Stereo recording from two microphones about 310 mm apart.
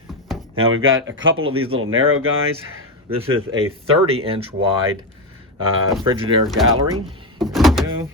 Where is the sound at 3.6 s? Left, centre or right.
Centre.